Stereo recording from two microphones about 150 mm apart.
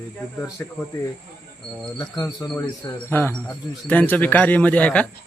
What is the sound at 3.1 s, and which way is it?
A man's voice, 15° left (ahead or behind).